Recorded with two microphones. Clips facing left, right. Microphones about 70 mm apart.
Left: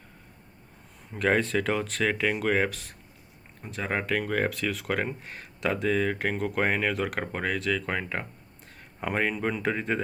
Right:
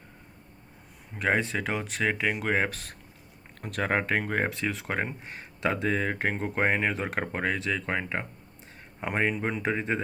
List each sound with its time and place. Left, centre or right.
1.2 s speech: centre
2.6 s speech: right
3.6 s speech: right; by 10.0 s centre